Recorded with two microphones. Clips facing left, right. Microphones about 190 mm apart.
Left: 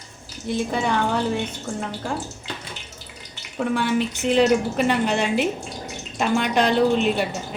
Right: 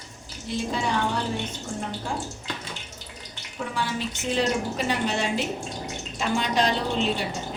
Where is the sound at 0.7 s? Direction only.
60° left (ahead or behind).